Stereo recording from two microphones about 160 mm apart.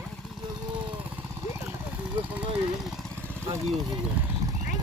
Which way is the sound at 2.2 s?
10° right (ahead or behind).